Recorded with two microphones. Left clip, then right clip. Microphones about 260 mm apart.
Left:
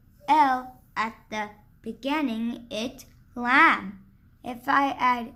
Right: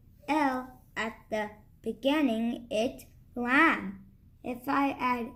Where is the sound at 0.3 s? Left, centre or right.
Centre.